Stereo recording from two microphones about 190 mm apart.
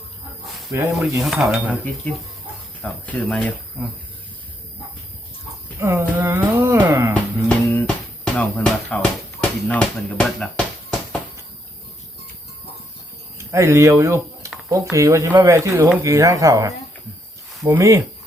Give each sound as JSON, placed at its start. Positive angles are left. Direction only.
{"t": 0.7, "sound": "speech", "side_deg": -15}
{"t": 1.2, "sound": "speech", "side_deg": 0}
{"t": 5.8, "sound": "a sound", "side_deg": -10}
{"t": 7.4, "sound": "a sound", "side_deg": 5}
{"t": 9.6, "sound": "speech", "side_deg": 5}
{"t": 13.4, "sound": "speech", "side_deg": -15}